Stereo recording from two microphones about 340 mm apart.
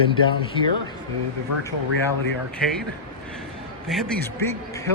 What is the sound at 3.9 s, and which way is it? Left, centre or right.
Speech, centre.